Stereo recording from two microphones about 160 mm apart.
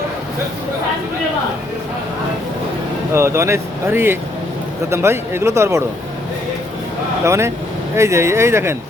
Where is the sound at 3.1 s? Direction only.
15° right (ahead or behind).